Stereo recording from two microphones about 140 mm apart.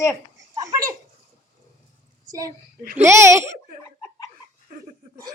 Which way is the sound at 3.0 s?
20° right (ahead or behind).